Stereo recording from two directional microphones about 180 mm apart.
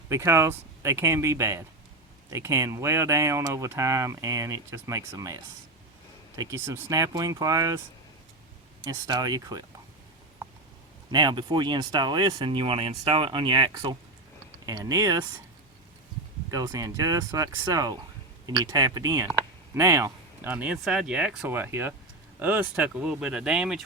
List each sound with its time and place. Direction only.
0.1 s speech: 15° right (ahead or behind)
8.8 s speech: 25° right (ahead or behind)
11.1 s speech: 25° right (ahead or behind)
16.5 s speech: 20° right (ahead or behind); by 23.8 s 5° right (ahead or behind)